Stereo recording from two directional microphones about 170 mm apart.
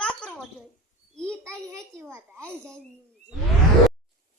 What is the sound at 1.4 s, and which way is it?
A child's voice, 15° right (ahead or behind).